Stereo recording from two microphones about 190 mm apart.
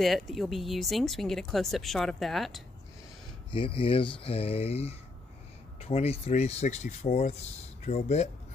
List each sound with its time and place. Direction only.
0.0 s speech: centre (ahead or behind)
3.5 s speech: 25° left (ahead or behind)